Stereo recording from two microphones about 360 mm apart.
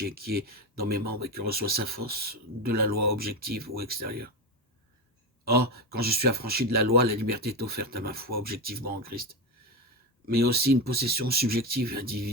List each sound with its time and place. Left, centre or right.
0.0 s speech: right
5.5 s speech: right